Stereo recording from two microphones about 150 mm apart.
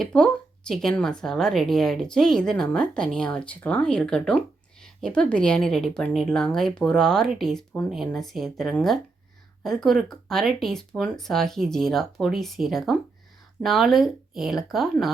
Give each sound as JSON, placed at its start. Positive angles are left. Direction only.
{"t": 0.0, "sound": "a woman's voice", "side_deg": 5}